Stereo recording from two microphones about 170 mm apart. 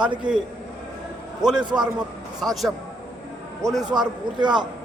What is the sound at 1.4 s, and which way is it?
A man's voice, 5° right (ahead or behind).